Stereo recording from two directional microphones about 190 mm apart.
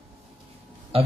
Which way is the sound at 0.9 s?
30° right (ahead or behind).